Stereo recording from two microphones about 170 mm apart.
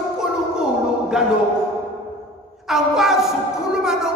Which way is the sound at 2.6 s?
Centre (ahead or behind).